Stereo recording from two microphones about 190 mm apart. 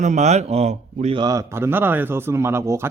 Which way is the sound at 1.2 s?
20° right (ahead or behind).